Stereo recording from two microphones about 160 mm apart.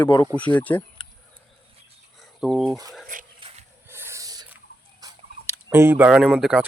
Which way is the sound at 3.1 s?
55° right (ahead or behind).